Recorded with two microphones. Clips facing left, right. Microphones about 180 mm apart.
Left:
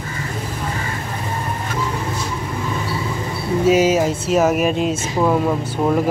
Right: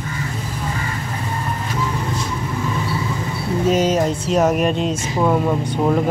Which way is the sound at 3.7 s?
5° left (ahead or behind).